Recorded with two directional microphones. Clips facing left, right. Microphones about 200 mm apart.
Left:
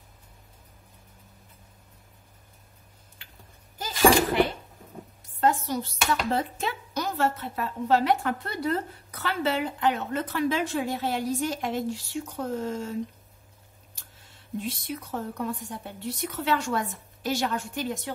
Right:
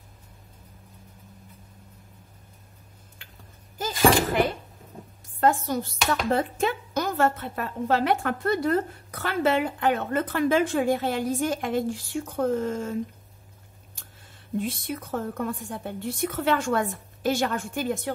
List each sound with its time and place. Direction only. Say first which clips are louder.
3.7 s a sound: even; 45° right (ahead or behind)
5.4 s speech: right 2 dB; 50° right (ahead or behind)
14.6 s speech: right 3 dB; 50° right (ahead or behind)